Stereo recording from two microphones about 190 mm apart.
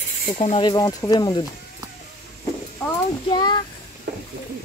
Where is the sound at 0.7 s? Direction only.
20° left (ahead or behind).